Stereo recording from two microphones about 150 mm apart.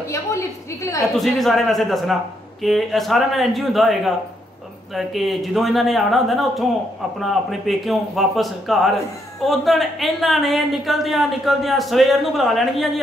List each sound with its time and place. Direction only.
0.1 s a woman's voice: 20° left (ahead or behind)
1.1 s a woman's voice: centre (ahead or behind)